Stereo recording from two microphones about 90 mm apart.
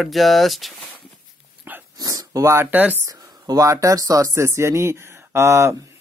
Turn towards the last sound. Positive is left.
turn(degrees=-30)  # may be behind; listen again after turning